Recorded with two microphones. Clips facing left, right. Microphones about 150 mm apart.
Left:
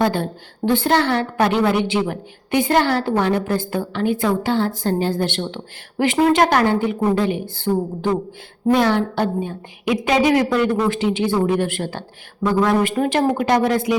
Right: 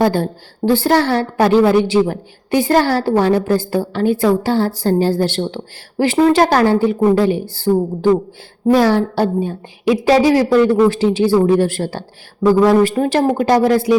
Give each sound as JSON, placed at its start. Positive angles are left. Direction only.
{"t": 0.0, "sound": "a woman's voice", "side_deg": -40}